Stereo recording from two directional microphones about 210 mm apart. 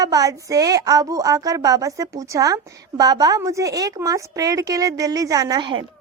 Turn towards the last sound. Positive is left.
turn(degrees=-20)  # may be behind; listen again after turning